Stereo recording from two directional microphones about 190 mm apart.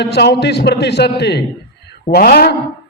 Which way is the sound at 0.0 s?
60° left (ahead or behind).